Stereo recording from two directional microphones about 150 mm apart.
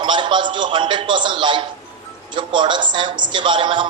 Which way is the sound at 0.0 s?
30° right (ahead or behind).